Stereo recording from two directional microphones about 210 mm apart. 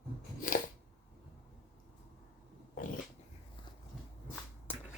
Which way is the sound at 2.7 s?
40° left (ahead or behind).